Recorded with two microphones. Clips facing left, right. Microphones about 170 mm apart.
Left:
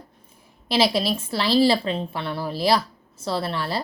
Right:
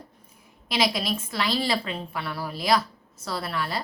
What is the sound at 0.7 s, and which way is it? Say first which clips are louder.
A woman's voice: left 5 dB; 30° left (ahead or behind).